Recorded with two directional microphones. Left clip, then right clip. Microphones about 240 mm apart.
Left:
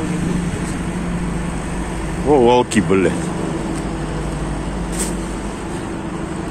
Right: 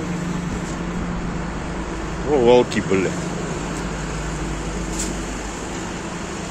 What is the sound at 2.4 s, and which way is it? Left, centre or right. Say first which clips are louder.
Speech: even; centre.